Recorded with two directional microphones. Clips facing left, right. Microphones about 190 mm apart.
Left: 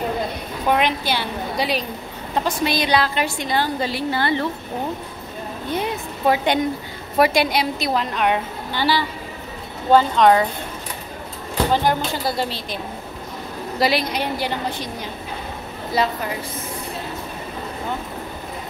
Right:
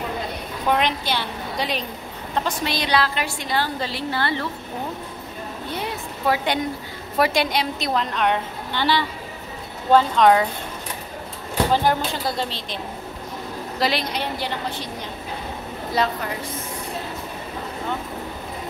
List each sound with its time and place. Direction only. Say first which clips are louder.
0.7 s a woman's voice: left 2 dB; 5° left (ahead or behind)
5.7 s a woman's voice: left 6 dB; 20° left (ahead or behind); by 10.4 s centre (ahead or behind)
11.5 s a woman's voice: left 1 dB; centre (ahead or behind)
16.0 s a woman's voice: left 1 dB; 5° left (ahead or behind)